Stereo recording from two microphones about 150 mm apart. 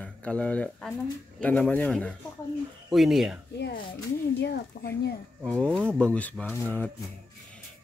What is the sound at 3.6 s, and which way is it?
Speech, 90° left.